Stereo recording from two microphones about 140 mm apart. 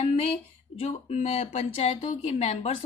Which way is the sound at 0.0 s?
45° left (ahead or behind).